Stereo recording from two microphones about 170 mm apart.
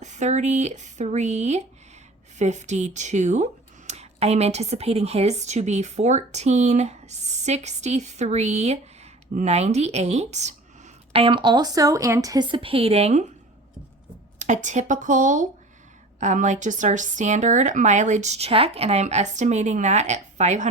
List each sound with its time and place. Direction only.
0.0 s speech: 45° right (ahead or behind)
14.3 s speech: 45° right (ahead or behind)